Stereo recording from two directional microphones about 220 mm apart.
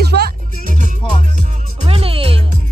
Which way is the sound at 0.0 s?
45° right (ahead or behind).